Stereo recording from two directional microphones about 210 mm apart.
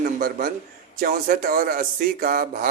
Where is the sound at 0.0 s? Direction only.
45° right (ahead or behind).